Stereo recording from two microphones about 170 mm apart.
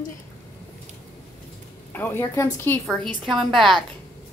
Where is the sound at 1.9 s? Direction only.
10° left (ahead or behind).